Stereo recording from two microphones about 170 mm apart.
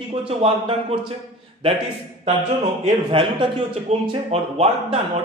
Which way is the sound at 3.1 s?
30° right (ahead or behind).